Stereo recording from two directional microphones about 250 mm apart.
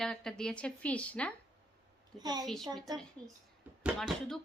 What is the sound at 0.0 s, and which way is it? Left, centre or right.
A woman's voice, centre.